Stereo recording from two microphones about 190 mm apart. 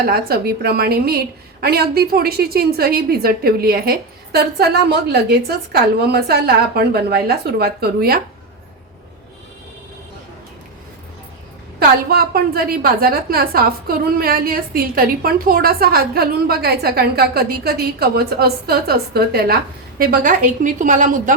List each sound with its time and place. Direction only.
0.1 s a woman's voice: 55° right (ahead or behind)
11.8 s a woman's voice: 50° right (ahead or behind)